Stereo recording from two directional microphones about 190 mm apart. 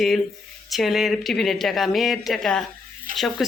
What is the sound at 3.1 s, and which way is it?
Speech, 45° right (ahead or behind).